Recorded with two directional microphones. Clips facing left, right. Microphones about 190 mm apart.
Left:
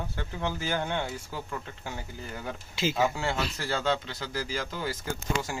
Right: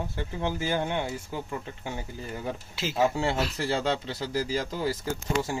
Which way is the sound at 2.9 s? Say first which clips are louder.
Right 5 dB; 30° right (ahead or behind).